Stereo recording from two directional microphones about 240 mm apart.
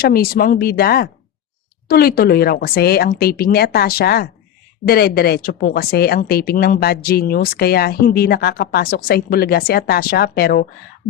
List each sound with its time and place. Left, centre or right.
0.0 s a woman's voice: left